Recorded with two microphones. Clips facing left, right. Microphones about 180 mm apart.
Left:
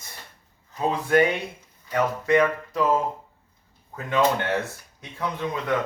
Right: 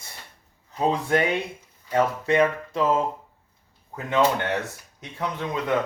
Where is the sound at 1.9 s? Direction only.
25° right (ahead or behind).